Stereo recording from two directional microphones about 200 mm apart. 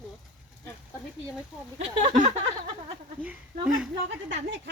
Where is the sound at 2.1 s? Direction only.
35° right (ahead or behind).